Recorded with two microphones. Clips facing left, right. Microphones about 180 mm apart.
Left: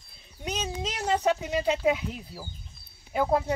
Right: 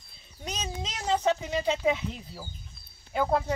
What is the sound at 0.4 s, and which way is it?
Speech, 10° left (ahead or behind).